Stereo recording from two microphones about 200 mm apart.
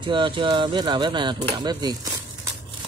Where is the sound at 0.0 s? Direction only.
25° right (ahead or behind).